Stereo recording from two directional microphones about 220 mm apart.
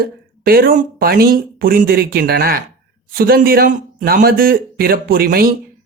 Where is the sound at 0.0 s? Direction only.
45° right (ahead or behind).